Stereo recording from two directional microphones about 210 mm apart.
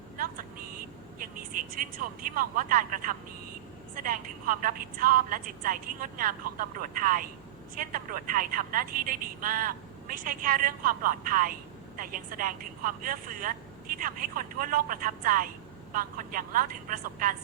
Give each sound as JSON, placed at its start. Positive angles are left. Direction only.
{"t": 1.7, "sound": "a woman's voice", "side_deg": -40}